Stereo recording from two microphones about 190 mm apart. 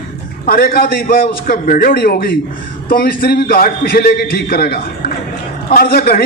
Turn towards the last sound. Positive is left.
turn(degrees=55)  # may be behind; listen again after turning